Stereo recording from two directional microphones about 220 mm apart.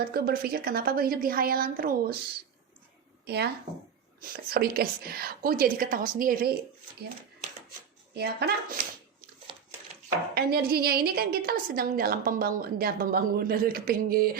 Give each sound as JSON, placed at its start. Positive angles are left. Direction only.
{"t": 0.0, "sound": "a woman's voice", "side_deg": -45}
{"t": 3.2, "sound": "a woman's voice", "side_deg": -45}
{"t": 8.1, "sound": "a woman's voice", "side_deg": -45}
{"t": 10.3, "sound": "a woman's voice", "side_deg": -45}